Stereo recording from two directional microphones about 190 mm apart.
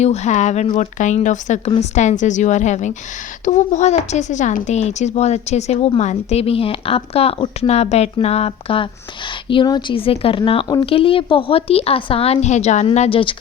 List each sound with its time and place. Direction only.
0.0 s speech: 35° left (ahead or behind)